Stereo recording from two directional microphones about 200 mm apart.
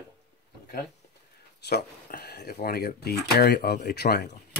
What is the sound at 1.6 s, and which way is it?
Speech, 55° left (ahead or behind).